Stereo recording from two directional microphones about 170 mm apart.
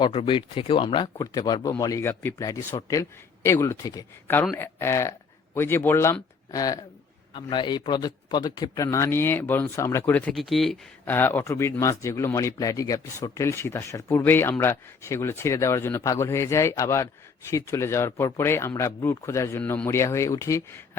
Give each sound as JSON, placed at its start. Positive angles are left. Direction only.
{"t": 0.0, "sound": "speech", "side_deg": 30}
{"t": 11.0, "sound": "speech", "side_deg": 10}